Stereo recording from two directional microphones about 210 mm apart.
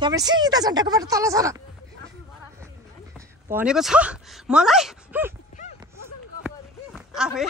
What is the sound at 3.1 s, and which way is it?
Speech, 5° right (ahead or behind).